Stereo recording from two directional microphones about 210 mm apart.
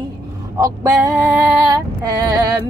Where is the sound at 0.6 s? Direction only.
15° right (ahead or behind).